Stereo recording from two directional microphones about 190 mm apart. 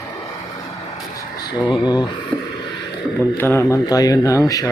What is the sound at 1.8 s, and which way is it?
Speech, 20° left (ahead or behind).